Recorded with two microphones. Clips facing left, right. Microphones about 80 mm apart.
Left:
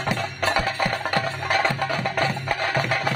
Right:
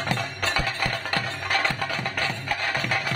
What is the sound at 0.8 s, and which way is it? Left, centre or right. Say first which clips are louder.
Music: left 4 dB; left.